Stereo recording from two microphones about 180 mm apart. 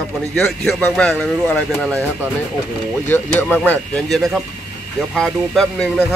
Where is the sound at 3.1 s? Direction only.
10° left (ahead or behind).